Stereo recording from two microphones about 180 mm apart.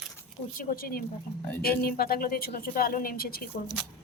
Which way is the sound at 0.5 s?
55° left (ahead or behind).